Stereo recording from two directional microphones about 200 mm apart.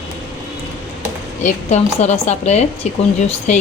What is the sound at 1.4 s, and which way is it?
Speech, 35° left (ahead or behind).